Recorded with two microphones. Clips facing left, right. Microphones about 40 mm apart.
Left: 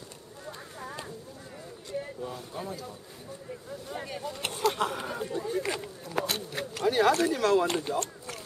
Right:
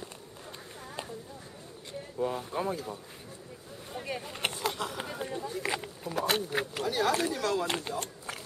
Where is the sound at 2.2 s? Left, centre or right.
Right.